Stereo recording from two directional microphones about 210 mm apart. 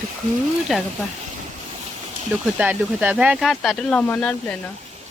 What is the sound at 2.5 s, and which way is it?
Speech, 10° right (ahead or behind).